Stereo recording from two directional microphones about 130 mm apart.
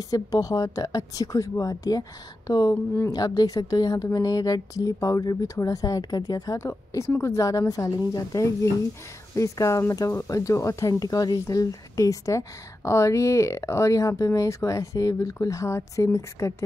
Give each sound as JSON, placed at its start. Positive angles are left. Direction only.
{"t": 0.1, "sound": "speech", "side_deg": 30}